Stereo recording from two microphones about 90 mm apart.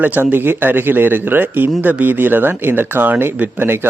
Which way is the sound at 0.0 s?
20° right (ahead or behind).